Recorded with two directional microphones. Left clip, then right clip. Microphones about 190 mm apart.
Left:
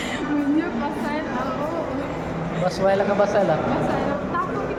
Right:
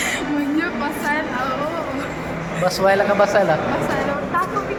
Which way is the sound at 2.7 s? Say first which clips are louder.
Right 4 dB; 20° right (ahead or behind).